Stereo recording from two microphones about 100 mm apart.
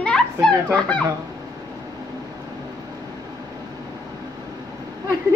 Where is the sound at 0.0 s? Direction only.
10° left (ahead or behind).